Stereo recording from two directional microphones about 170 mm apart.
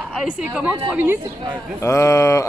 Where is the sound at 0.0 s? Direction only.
5° right (ahead or behind).